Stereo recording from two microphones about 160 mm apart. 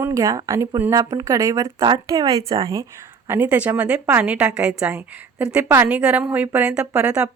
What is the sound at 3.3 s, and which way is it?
A woman's voice, 10° right (ahead or behind).